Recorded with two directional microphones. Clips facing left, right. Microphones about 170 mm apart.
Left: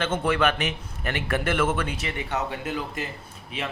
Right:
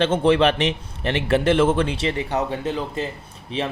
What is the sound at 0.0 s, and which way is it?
Speech, 30° right (ahead or behind).